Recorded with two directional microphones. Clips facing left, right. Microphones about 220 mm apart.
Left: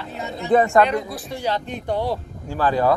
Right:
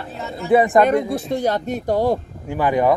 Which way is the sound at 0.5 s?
15° right (ahead or behind).